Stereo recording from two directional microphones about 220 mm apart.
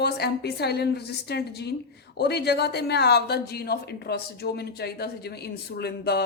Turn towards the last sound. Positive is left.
turn(degrees=45)  # may be behind; listen again after turning